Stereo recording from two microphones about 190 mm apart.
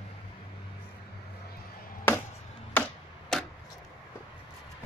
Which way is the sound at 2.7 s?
5° left (ahead or behind).